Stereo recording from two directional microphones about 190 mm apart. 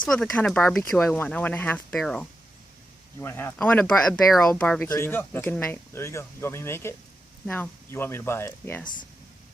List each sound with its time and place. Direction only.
0.0 s speech: 5° left (ahead or behind)